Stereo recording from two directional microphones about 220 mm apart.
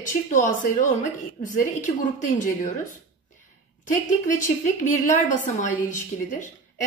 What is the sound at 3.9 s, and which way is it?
A woman's voice, 35° left (ahead or behind).